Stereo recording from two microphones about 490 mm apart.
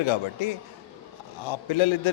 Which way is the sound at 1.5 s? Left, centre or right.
Left.